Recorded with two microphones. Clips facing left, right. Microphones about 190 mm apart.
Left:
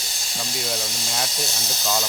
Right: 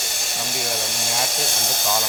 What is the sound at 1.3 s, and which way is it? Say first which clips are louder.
Steam: right 3 dB; 55° right (ahead or behind).